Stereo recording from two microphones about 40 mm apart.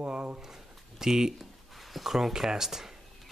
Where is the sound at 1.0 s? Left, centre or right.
Centre.